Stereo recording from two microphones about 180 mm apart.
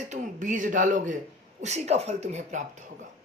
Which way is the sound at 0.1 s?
45° right (ahead or behind).